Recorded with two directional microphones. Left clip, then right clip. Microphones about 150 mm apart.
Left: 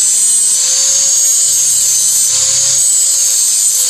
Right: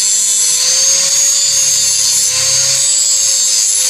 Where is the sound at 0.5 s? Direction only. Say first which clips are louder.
Right 1 dB; 5° right (ahead or behind).